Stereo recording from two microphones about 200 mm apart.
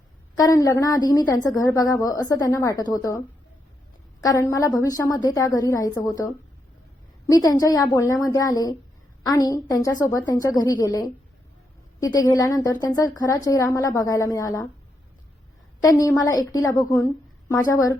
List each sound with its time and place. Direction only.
0.3 s a woman's voice: 15° left (ahead or behind)
15.8 s a woman's voice: 15° left (ahead or behind)